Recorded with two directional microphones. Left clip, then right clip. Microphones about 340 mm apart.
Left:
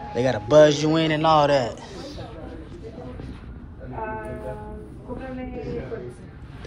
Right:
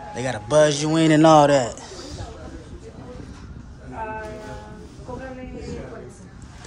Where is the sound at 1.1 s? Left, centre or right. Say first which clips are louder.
Right 5 dB; right.